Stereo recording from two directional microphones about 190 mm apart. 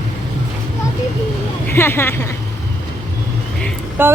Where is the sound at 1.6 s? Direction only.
10° left (ahead or behind).